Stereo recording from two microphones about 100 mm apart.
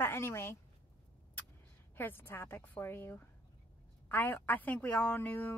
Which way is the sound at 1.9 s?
20° left (ahead or behind).